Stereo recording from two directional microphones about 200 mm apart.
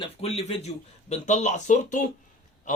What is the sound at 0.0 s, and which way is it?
A man's voice, 30° left (ahead or behind).